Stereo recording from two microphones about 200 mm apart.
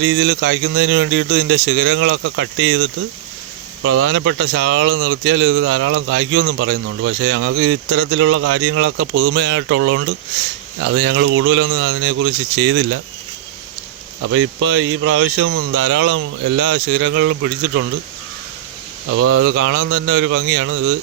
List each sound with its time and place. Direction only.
0.0 s speech: 70° right (ahead or behind)
3.8 s speech: 80° right
10.8 s speech: 70° right (ahead or behind)
14.3 s speech: 75° right (ahead or behind)
19.1 s speech: 90° right; by 20.7 s 70° right (ahead or behind)